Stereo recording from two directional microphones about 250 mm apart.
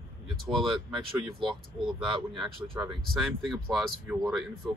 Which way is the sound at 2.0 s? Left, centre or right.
Centre.